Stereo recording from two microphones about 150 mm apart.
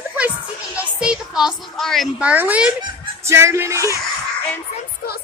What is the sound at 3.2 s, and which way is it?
Music, 20° right (ahead or behind).